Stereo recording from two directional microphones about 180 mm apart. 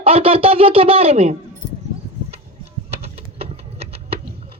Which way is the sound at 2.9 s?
35° right (ahead or behind).